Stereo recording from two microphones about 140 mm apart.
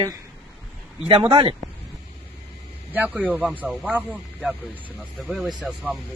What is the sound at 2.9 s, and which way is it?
Speech, 10° right (ahead or behind).